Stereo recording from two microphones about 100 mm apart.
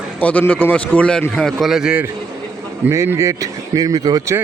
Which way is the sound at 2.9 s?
30° right (ahead or behind).